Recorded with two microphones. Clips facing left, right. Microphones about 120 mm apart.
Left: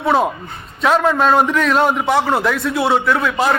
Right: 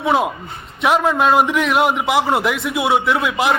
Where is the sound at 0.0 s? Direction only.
10° right (ahead or behind).